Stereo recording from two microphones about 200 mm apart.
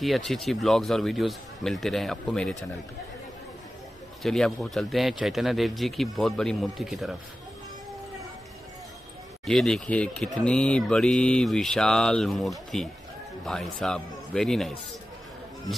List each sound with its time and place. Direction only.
0.0 s speech: centre (ahead or behind)
4.2 s speech: centre (ahead or behind)
9.5 s speech: centre (ahead or behind)